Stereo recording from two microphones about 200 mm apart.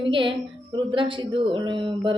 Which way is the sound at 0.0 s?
25° right (ahead or behind).